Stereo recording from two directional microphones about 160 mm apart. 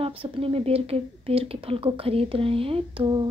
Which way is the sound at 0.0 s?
35° right (ahead or behind).